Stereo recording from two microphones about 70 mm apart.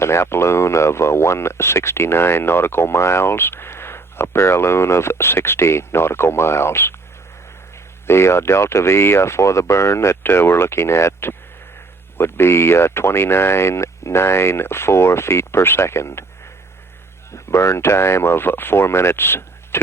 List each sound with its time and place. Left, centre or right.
0.0 s speech: left
8.0 s speech: left
17.3 s speech: left